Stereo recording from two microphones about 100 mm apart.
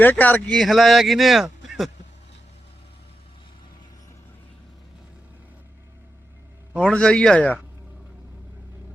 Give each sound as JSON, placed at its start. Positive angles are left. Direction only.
{"t": 0.0, "sound": "speech", "side_deg": 15}
{"t": 0.6, "sound": "a man's voice", "side_deg": 0}
{"t": 6.8, "sound": "speech", "side_deg": 10}